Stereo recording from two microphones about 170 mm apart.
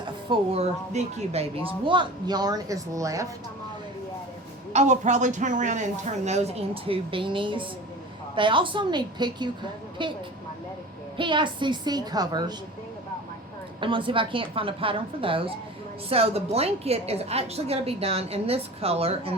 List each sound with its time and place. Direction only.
0.3 s speech: 40° right (ahead or behind); by 3.2 s 20° right (ahead or behind)
4.7 s a woman's voice: 45° right (ahead or behind); by 10.1 s 30° right (ahead or behind)
11.2 s speech: 30° right (ahead or behind)
13.8 s a woman's voice: 30° right (ahead or behind)